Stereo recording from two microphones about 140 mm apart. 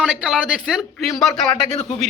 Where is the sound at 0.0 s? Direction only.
5° right (ahead or behind).